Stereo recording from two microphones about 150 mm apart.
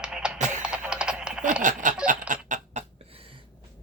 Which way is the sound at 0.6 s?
5° right (ahead or behind).